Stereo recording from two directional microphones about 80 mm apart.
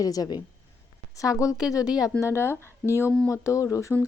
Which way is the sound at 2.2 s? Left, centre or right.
Left.